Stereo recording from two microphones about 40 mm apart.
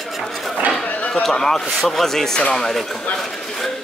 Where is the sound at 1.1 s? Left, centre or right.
Centre.